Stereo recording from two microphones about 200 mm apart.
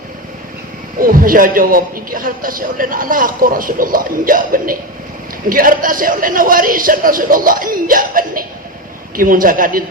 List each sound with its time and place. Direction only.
0.9 s a man's voice: 45° right (ahead or behind)